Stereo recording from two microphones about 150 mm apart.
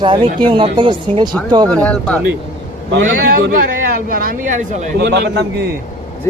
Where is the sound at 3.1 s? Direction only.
70° right (ahead or behind).